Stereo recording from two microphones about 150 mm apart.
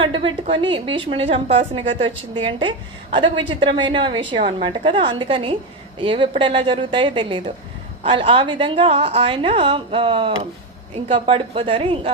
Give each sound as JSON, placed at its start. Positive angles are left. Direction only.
{"t": 0.0, "sound": "a woman's voice", "side_deg": -35}